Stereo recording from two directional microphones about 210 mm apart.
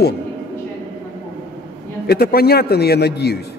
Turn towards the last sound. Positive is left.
turn(degrees=50)  # may be behind; listen again after turning